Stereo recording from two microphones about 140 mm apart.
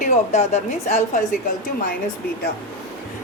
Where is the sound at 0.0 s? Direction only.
55° left (ahead or behind).